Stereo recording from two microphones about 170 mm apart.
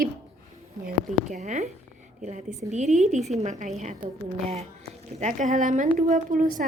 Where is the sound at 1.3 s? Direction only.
45° right (ahead or behind).